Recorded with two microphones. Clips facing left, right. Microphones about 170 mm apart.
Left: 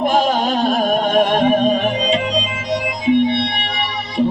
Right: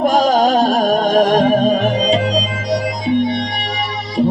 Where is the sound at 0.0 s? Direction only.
40° right (ahead or behind).